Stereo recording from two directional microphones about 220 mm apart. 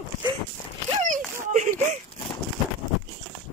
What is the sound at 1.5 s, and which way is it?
Speech, 35° right (ahead or behind).